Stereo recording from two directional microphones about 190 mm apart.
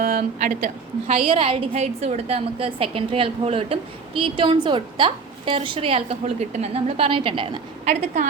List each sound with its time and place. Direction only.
0.0 s a woman's voice: 45° right (ahead or behind)
1.3 s a woman's voice: 30° right (ahead or behind)